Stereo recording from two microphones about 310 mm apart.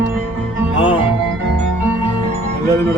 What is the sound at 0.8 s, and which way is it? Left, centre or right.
Music, centre.